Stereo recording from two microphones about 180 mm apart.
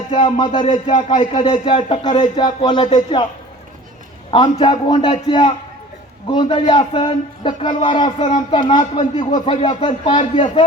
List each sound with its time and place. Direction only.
0.1 s speech: 30° left (ahead or behind)
4.3 s speech: 25° left (ahead or behind)